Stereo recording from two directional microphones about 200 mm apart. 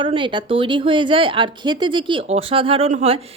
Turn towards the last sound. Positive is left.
turn(degrees=-30)  # may be behind; listen again after turning